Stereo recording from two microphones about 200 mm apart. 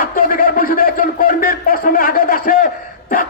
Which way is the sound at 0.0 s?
45° left (ahead or behind).